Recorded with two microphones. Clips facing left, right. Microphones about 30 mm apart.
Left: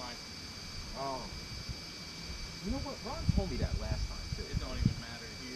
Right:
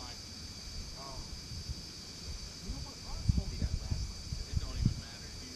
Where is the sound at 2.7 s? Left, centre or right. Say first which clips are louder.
Left 12 dB; centre.